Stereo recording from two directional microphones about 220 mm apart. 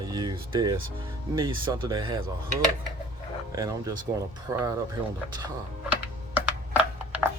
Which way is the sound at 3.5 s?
15° right (ahead or behind).